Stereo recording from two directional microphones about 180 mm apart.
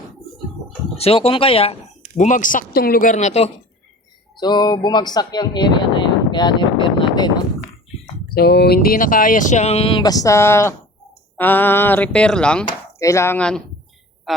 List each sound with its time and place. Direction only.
0.9 s speech: 35° left (ahead or behind)
2.1 s speech: 45° left (ahead or behind)
4.4 s speech: 25° left (ahead or behind)
8.4 s speech: 60° left (ahead or behind); by 12.6 s 5° left (ahead or behind)
12.6 s chopping: 15° left (ahead or behind)
14.3 s a sound: centre (ahead or behind)